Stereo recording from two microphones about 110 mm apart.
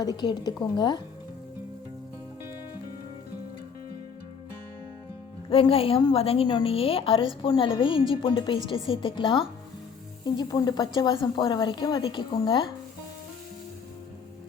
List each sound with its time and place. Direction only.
0.0 s a woman's voice: 40° left (ahead or behind)
5.5 s a woman's voice: 55° left (ahead or behind)